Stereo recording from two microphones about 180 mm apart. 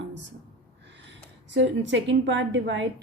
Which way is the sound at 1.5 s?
85° right.